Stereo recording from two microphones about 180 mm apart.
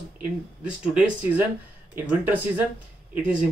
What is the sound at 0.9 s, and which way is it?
Speech, 10° right (ahead or behind).